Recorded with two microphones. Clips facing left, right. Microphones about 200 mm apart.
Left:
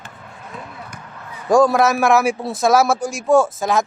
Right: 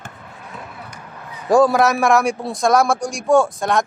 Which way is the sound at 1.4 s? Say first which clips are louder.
Even; centre (ahead or behind).